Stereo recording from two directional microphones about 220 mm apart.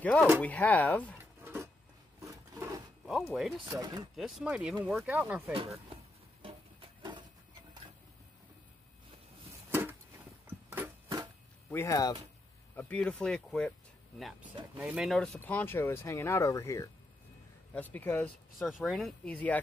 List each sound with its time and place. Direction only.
0.0 s speech: 5° left (ahead or behind)
1.1 s a sound: 10° right (ahead or behind)
2.2 s filing: 15° right (ahead or behind)
3.6 s speech: 15° right (ahead or behind)
4.1 s speech: centre (ahead or behind)
5.5 s speech: 25° right (ahead or behind)
6.4 s a sound: 25° right (ahead or behind)
9.7 s a sound: 10° right (ahead or behind)
10.4 s music: 10° right (ahead or behind)
11.7 s speech: 15° left (ahead or behind)